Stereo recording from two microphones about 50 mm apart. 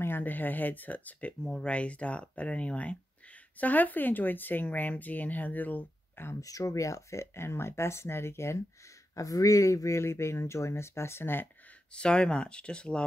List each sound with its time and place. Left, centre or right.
0.2 s speech: left
1.4 s speech: centre
1.7 s speech: left
6.2 s speech: left
6.6 s speech: left
9.5 s speech: left
11.9 s speech: centre